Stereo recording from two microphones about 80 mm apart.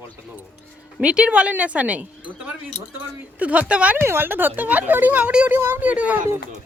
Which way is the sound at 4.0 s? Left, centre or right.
Right.